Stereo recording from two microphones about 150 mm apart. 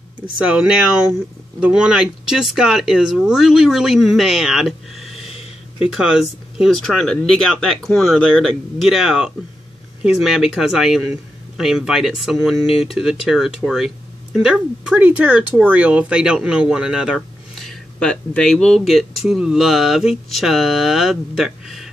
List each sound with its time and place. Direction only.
0.5 s speech: 5° right (ahead or behind)
5.2 s a sound: 40° left (ahead or behind)
5.8 s speech: 5° right (ahead or behind)